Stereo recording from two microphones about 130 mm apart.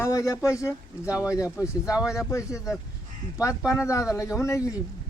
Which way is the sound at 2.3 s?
25° left (ahead or behind).